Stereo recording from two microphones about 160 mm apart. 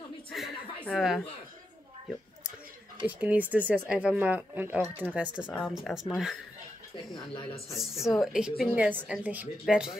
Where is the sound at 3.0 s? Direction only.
10° right (ahead or behind).